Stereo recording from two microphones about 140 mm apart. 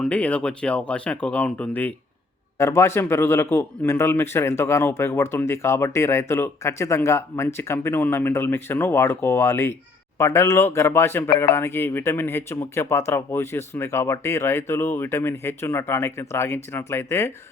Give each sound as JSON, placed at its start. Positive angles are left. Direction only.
{"t": 0.0, "sound": "a man's voice", "side_deg": 10}